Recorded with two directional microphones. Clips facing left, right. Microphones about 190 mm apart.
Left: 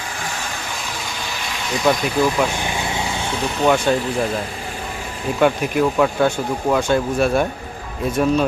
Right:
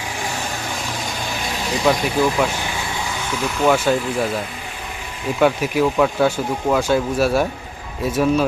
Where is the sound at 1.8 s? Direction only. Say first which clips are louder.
Even; centre (ahead or behind).